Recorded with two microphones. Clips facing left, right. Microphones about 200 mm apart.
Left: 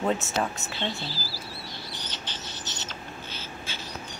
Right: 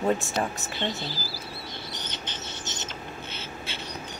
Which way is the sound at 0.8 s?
20° right (ahead or behind).